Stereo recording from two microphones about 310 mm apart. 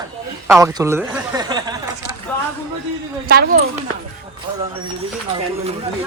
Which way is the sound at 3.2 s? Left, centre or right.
Right.